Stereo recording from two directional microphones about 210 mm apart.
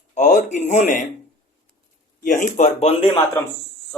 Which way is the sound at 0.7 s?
35° left (ahead or behind).